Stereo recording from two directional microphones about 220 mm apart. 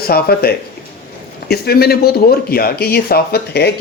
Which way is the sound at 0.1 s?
45° left (ahead or behind).